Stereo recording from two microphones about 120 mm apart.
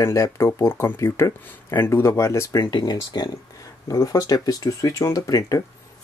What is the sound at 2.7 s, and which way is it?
Speech, 35° left (ahead or behind).